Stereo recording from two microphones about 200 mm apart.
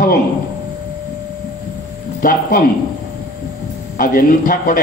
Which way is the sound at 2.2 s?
45° left (ahead or behind).